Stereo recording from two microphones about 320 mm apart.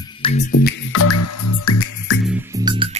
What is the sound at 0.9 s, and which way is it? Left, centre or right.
Music, left.